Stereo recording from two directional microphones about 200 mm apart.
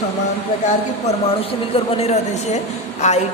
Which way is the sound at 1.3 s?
30° left (ahead or behind).